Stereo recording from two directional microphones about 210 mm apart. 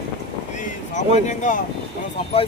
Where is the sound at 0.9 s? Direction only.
35° left (ahead or behind).